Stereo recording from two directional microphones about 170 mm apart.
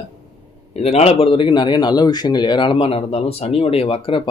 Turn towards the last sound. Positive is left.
turn(degrees=30)  # may be behind; listen again after turning